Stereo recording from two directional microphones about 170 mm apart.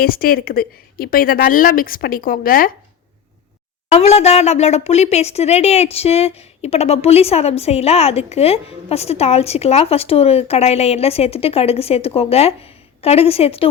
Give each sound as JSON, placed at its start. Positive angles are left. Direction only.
{"t": 0.0, "sound": "a woman's voice", "side_deg": 60}
{"t": 3.8, "sound": "speech", "side_deg": 40}